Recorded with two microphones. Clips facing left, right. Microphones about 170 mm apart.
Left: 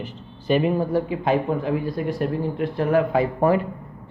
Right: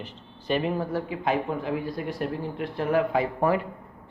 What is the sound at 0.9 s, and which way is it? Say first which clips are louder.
Speech: left 7 dB; 20° left (ahead or behind).